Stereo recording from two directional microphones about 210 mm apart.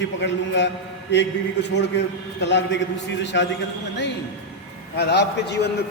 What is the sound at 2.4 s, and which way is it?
A man's voice, 55° left (ahead or behind).